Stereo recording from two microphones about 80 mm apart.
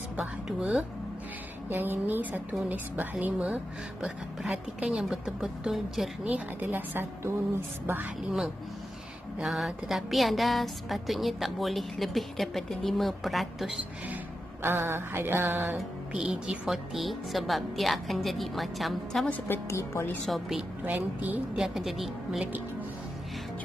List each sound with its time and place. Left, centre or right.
0.5 s speech: centre
1.7 s music: right
4.0 s speech: centre
6.2 s music: right
9.4 s a woman's voice: centre
14.6 s music: right
16.1 s a woman's voice: centre
19.4 s a woman's voice: left
20.2 s a woman's voice: centre
20.8 s music: right
21.5 s a woman's voice: centre